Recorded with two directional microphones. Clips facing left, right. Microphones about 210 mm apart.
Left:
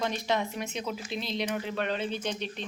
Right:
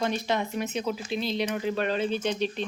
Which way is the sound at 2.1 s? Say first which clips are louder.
Right 6 dB; 90° right.